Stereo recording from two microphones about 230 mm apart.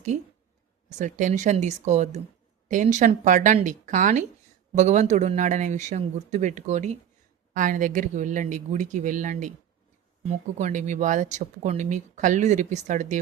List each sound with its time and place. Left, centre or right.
0.9 s speech: right